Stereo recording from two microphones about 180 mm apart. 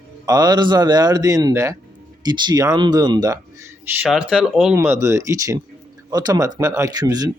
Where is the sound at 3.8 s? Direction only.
10° right (ahead or behind).